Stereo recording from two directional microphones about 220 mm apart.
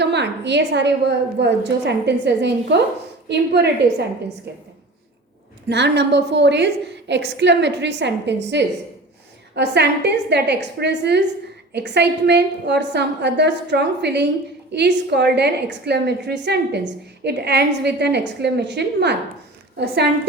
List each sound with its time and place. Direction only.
0.0 s a woman's voice: 50° right (ahead or behind)
5.6 s a woman's voice: 50° right (ahead or behind)